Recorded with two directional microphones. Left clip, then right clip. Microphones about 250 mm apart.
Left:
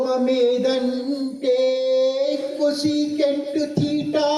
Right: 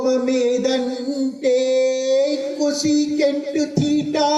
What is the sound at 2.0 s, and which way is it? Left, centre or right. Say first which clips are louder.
Music: right 1 dB; right.